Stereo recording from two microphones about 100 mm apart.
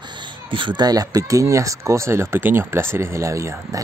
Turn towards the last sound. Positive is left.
turn(degrees=-30)  # may be behind; listen again after turning